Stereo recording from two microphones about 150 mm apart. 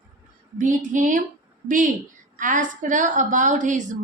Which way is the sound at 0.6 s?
55° right (ahead or behind).